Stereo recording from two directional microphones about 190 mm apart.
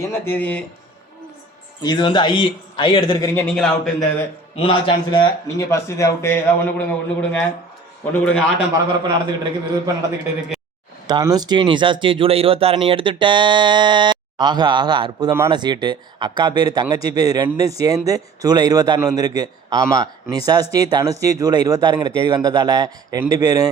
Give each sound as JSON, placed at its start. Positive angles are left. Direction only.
{"t": 0.0, "sound": "speech", "side_deg": 10}
{"t": 1.8, "sound": "speech", "side_deg": 25}
{"t": 3.4, "sound": "a man's voice", "side_deg": 5}
{"t": 4.5, "sound": "a man's voice", "side_deg": 30}
{"t": 9.0, "sound": "speech", "side_deg": -20}
{"t": 11.0, "sound": "speech", "side_deg": -20}